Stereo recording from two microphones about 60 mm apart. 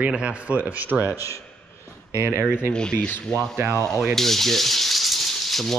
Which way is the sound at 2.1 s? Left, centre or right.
Right.